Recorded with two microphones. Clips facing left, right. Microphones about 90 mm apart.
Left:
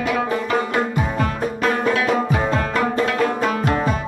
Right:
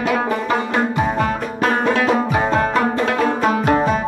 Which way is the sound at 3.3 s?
35° right (ahead or behind).